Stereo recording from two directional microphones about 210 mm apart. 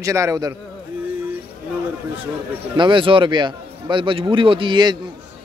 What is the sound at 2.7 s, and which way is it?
A man's voice, 25° right (ahead or behind).